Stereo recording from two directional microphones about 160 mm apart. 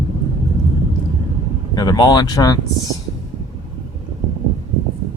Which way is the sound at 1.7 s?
25° left (ahead or behind).